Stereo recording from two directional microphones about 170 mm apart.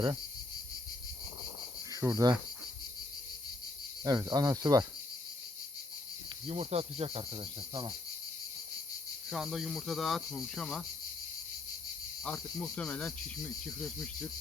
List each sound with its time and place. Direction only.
1.9 s cricket: 20° right (ahead or behind)
4.0 s cricket: 20° right (ahead or behind)
6.5 s cricket: 40° right (ahead or behind)
9.3 s speech: centre (ahead or behind)
12.2 s speech: 5° left (ahead or behind)